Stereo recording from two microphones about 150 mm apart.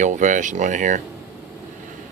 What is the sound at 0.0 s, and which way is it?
Speech, 55° right (ahead or behind).